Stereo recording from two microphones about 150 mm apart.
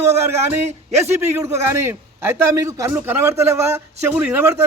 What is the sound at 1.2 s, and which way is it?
A man's voice, 20° right (ahead or behind).